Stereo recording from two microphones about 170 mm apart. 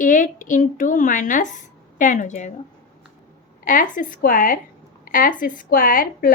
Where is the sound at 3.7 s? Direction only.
50° left (ahead or behind).